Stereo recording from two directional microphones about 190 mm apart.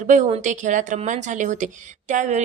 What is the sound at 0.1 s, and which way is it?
A woman's voice, 40° right (ahead or behind).